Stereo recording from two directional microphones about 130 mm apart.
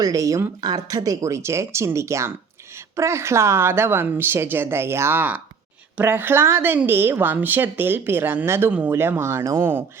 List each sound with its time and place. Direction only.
0.0 s a woman's voice: 25° right (ahead or behind)